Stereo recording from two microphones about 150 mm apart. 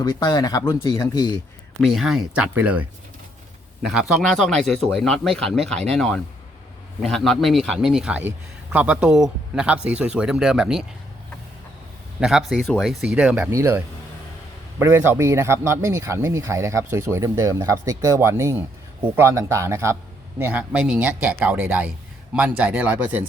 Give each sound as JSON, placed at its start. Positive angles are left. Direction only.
{"t": 0.0, "sound": "speech", "side_deg": 25}
{"t": 1.8, "sound": "a man's voice", "side_deg": 0}
{"t": 3.8, "sound": "a man's voice", "side_deg": -5}
{"t": 12.2, "sound": "a man's voice", "side_deg": -5}